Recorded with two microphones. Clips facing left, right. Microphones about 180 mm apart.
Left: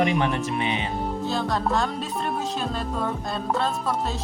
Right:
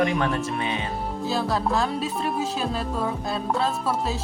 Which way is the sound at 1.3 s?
5° right (ahead or behind).